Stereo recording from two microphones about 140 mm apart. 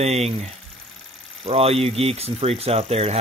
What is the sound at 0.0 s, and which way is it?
Speech, 50° right (ahead or behind).